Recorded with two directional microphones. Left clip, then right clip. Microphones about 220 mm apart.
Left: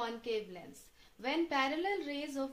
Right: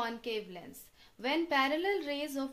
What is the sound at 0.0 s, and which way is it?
A woman's voice, 45° right (ahead or behind).